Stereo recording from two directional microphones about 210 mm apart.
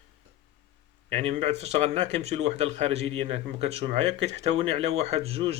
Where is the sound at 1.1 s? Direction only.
30° right (ahead or behind).